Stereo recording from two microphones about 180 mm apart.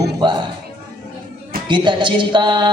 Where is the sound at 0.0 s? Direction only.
25° right (ahead or behind).